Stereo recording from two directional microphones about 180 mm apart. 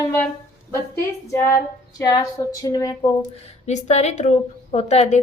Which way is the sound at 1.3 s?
15° left (ahead or behind).